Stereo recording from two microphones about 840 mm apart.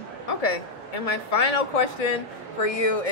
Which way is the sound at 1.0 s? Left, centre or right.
Left.